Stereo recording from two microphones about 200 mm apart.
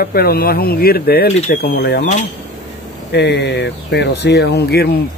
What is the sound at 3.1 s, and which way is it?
Speech, 55° left (ahead or behind).